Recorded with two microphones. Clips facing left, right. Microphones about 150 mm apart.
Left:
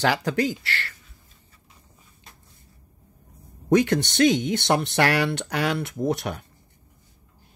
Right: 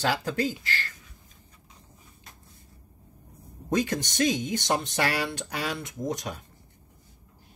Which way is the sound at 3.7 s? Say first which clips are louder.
Left 7 dB; 70° left (ahead or behind).